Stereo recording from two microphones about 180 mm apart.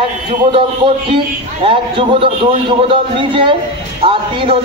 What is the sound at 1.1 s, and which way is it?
A man's voice, 30° right (ahead or behind).